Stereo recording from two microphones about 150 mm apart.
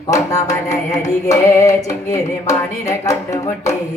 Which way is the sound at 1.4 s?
20° left (ahead or behind).